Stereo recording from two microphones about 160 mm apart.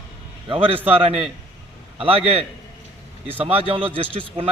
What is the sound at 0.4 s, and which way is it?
Speech, 35° right (ahead or behind).